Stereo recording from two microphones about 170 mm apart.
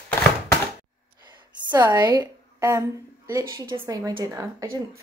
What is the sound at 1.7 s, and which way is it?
A woman's voice, 25° right (ahead or behind).